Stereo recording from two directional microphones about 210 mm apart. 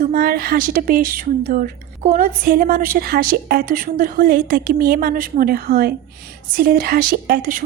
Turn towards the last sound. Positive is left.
turn(degrees=-40)  # may be behind; listen again after turning